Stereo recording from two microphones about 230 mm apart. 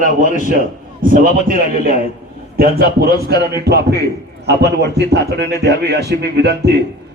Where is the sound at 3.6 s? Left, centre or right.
Right.